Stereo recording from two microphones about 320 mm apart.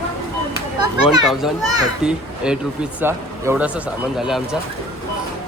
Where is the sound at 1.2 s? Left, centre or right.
Centre.